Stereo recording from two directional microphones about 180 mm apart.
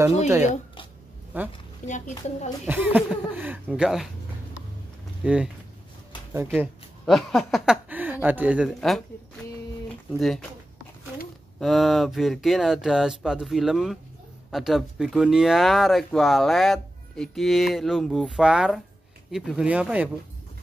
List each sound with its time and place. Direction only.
1.3 s speech: 10° right (ahead or behind)
1.9 s a woman's voice: 40° left (ahead or behind)
2.6 s speech: 10° right (ahead or behind)
5.2 s speech: 5° right (ahead or behind)
7.1 s speech: centre (ahead or behind)
10.1 s speech: centre (ahead or behind)
11.6 s speech: centre (ahead or behind)